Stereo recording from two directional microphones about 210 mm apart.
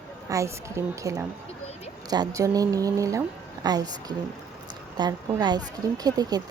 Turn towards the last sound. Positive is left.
turn(degrees=-20)  # may be behind; listen again after turning